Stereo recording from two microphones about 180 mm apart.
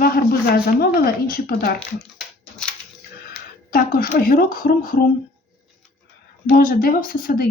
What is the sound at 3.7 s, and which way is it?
A woman's voice, 50° left (ahead or behind).